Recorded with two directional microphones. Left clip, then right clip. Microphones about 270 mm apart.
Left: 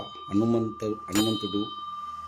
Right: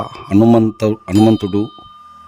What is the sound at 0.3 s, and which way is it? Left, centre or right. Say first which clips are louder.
Speech: right 14 dB; right.